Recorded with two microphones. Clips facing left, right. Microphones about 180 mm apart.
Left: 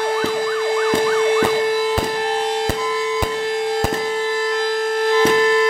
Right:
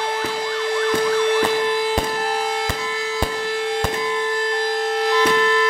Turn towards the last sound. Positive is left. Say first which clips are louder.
# left 3 dB
turn(degrees=45)  # may be behind; listen again after turning